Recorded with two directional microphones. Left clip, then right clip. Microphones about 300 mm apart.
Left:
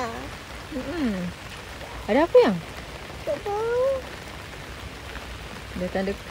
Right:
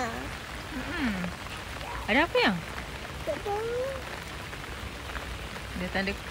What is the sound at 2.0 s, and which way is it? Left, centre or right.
Speech, centre.